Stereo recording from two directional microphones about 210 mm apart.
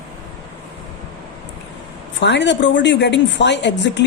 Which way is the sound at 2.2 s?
55° left (ahead or behind).